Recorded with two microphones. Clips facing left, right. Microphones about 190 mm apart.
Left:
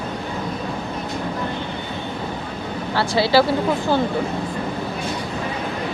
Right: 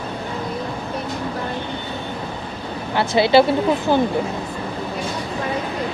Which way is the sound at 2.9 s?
20° right (ahead or behind).